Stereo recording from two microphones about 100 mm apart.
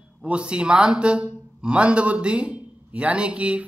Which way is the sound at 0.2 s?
10° right (ahead or behind).